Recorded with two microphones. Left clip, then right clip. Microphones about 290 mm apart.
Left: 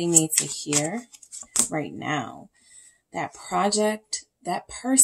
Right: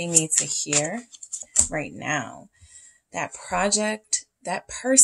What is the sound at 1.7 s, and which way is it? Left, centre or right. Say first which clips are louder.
A woman's voice: right 1 dB; right.